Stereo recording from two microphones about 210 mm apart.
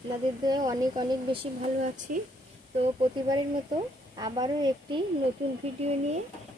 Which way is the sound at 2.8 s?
25° right (ahead or behind).